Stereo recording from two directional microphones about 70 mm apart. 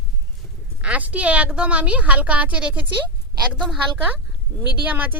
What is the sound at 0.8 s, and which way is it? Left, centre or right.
Speech, centre.